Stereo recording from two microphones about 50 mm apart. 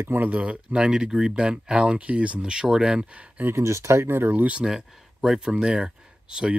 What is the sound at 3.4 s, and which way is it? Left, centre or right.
Speech, right.